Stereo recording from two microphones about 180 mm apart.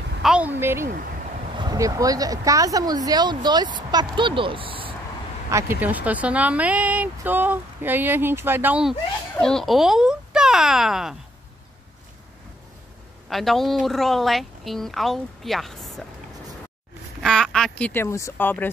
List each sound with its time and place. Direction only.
0.2 s a sound: 5° right (ahead or behind)
1.6 s speech: 20° right (ahead or behind)
5.5 s speech: 15° right (ahead or behind)
9.4 s a child's voice: 5° left (ahead or behind)
13.3 s a woman's voice: centre (ahead or behind)
17.2 s speech: 5° left (ahead or behind)